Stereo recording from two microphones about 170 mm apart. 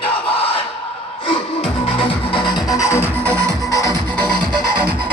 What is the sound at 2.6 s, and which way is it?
Music, 20° left (ahead or behind).